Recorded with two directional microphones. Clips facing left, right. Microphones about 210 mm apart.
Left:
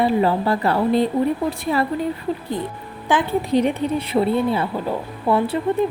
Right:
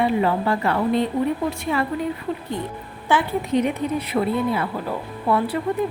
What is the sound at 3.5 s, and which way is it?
Speech, 30° left (ahead or behind).